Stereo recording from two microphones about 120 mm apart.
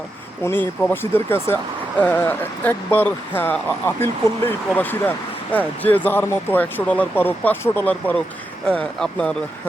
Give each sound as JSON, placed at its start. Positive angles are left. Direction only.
{"t": 0.4, "sound": "speech", "side_deg": 15}